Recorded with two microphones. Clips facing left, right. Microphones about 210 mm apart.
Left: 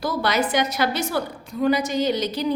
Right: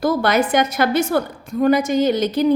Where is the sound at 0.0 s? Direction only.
50° right (ahead or behind).